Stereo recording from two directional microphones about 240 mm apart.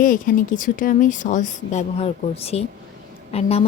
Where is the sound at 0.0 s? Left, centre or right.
Left.